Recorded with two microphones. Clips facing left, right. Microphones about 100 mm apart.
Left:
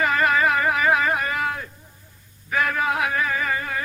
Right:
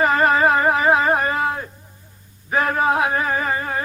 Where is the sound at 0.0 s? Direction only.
35° right (ahead or behind).